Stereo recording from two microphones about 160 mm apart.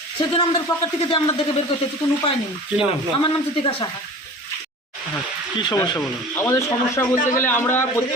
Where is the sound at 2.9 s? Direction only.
30° left (ahead or behind).